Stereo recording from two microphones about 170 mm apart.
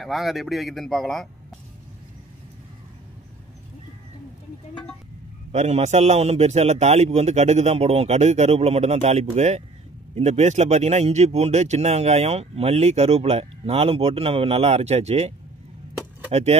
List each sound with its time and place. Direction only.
0.0 s speech: centre (ahead or behind)
5.5 s speech: 40° right (ahead or behind)